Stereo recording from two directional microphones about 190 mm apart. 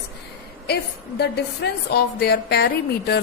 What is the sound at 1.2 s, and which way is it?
A woman's voice, 60° left (ahead or behind).